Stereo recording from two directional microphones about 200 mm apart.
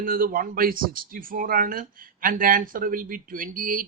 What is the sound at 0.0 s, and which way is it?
Speech, 45° right (ahead or behind).